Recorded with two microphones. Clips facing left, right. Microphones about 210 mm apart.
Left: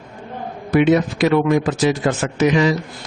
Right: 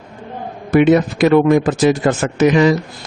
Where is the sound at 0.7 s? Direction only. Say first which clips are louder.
Right 3 dB; 50° right (ahead or behind).